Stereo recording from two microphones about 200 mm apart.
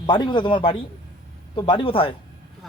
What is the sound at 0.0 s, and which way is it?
Speech, 20° left (ahead or behind).